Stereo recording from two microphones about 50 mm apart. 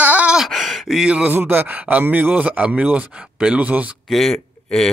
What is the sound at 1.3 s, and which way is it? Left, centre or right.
Speech, right.